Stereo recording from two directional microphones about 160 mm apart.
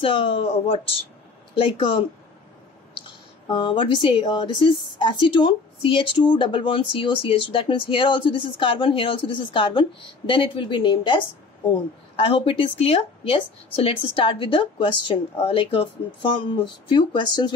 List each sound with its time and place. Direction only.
0.0 s speech: 35° left (ahead or behind)
3.4 s speech: 30° left (ahead or behind)